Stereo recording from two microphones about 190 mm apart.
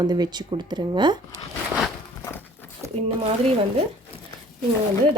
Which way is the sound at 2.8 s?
15° right (ahead or behind).